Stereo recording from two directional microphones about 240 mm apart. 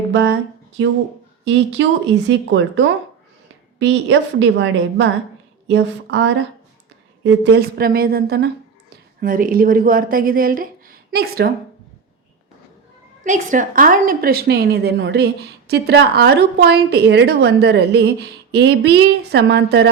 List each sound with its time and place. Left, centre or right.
0.1 s speech: right
1.5 s a woman's voice: right
13.2 s a woman's voice: right